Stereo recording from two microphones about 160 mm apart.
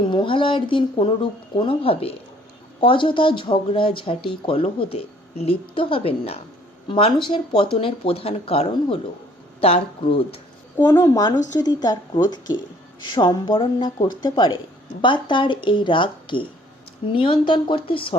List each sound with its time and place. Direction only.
0.0 s speech: 30° left (ahead or behind)
10.8 s a woman's voice: 20° left (ahead or behind)